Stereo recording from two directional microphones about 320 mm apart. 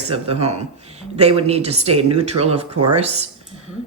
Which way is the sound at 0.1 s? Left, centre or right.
Centre.